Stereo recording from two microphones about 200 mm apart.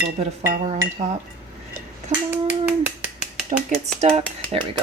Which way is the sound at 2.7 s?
5° right (ahead or behind).